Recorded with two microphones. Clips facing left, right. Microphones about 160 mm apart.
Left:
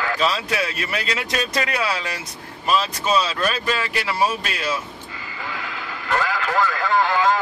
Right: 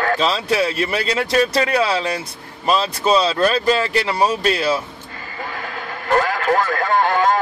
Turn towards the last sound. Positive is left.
turn(degrees=-50)  # may be behind; listen again after turning